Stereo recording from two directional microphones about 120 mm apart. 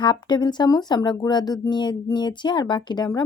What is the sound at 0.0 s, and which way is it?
A woman's voice, 40° left (ahead or behind).